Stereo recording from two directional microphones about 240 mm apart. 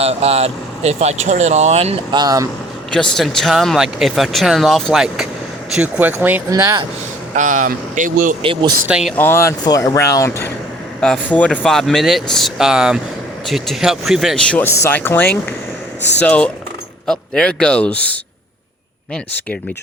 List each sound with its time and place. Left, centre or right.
0.0 s speech: right
2.9 s speech: centre
7.3 s speech: right
8.4 s speech: right
8.9 s speech: centre
9.1 s speech: centre